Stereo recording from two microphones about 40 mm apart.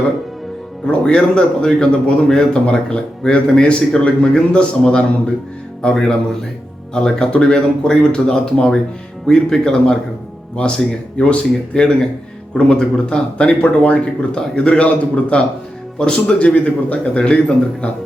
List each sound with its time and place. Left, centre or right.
1.0 s a man's voice: left
11.2 s a man's voice: left
16.4 s a man's voice: left